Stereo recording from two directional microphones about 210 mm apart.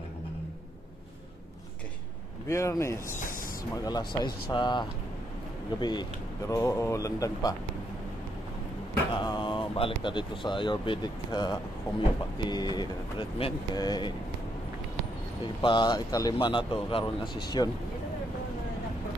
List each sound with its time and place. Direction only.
2.4 s speech: 15° left (ahead or behind)
9.1 s speech: 20° left (ahead or behind)
15.6 s speech: 20° left (ahead or behind)